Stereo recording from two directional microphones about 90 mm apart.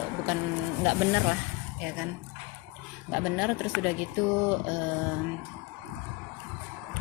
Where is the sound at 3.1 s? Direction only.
10° right (ahead or behind).